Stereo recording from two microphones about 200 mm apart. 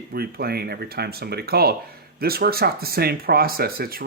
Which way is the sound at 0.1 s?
50° right (ahead or behind).